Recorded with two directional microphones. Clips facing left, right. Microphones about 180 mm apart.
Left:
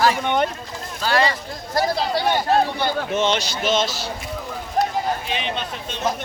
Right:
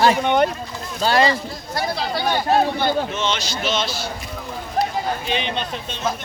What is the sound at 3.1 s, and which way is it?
Speech, 55° left (ahead or behind).